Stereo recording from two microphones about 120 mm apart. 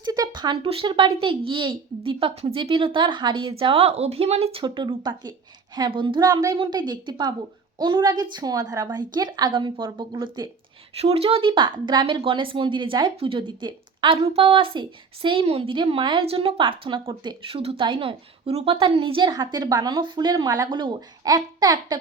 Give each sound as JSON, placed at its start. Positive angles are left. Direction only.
{"t": 0.0, "sound": "a woman's voice", "side_deg": -35}
{"t": 4.6, "sound": "a woman's voice", "side_deg": -40}
{"t": 10.9, "sound": "a woman's voice", "side_deg": -55}
{"t": 20.7, "sound": "a woman's voice", "side_deg": -40}